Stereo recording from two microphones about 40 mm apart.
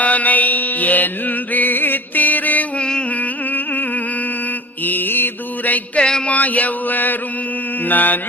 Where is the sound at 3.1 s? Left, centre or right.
Left.